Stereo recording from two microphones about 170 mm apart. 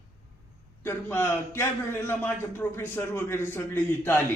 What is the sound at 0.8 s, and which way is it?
A man's voice, 15° left (ahead or behind).